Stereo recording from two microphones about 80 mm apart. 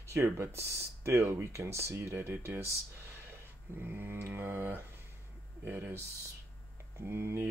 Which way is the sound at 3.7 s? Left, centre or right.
Right.